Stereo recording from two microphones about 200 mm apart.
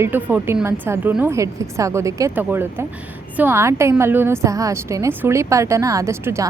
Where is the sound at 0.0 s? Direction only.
10° right (ahead or behind).